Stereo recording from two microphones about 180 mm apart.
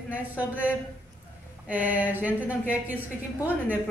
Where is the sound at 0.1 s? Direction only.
10° right (ahead or behind).